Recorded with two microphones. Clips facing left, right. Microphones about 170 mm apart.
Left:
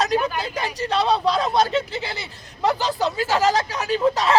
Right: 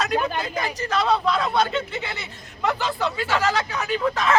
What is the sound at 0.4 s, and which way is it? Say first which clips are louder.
Speech: left 1 dB; 30° left (ahead or behind).